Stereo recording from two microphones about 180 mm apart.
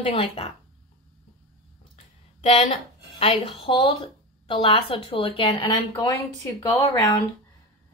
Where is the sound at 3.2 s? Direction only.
30° left (ahead or behind).